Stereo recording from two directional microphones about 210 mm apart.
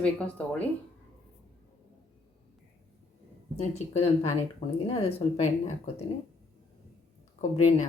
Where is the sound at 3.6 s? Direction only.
30° left (ahead or behind).